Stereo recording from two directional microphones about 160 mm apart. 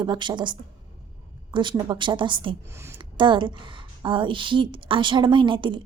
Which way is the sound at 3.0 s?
30° right (ahead or behind).